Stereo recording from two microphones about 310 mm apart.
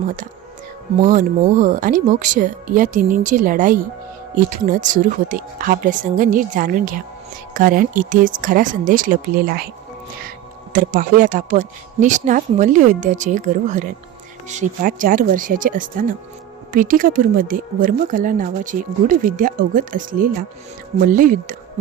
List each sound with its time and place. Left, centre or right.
1.0 s speech: right
10.2 s speech: right